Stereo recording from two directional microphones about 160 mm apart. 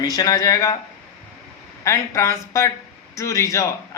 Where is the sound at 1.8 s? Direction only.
20° left (ahead or behind).